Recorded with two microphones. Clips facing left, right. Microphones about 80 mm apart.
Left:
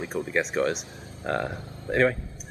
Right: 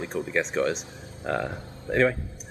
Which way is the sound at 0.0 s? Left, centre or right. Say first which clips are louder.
Even; centre.